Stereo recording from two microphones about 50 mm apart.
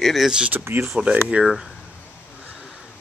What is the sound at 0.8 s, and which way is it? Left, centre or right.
Speech, right.